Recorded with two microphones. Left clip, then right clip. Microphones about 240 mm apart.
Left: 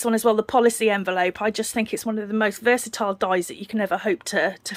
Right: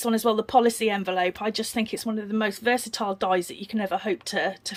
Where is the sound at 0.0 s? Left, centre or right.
Centre.